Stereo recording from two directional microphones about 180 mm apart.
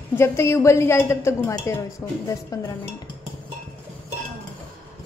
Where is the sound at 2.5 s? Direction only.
20° left (ahead or behind).